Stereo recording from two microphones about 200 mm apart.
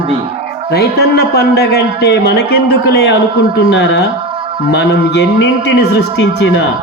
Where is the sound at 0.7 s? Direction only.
55° left (ahead or behind).